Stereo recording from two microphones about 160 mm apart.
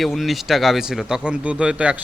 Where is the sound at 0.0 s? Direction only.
Centre (ahead or behind).